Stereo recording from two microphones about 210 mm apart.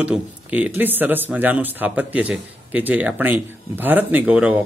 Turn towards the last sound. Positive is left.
turn(degrees=-5)  # may be behind; listen again after turning